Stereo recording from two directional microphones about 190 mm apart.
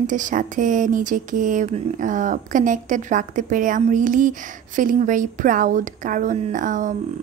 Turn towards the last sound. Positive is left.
turn(degrees=-40)  # may be behind; listen again after turning